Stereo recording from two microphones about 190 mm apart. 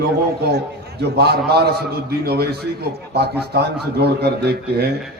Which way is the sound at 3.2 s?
60° right (ahead or behind).